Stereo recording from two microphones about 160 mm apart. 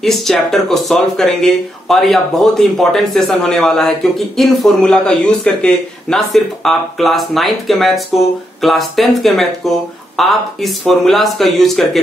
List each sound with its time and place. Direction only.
0.0 s speech: centre (ahead or behind)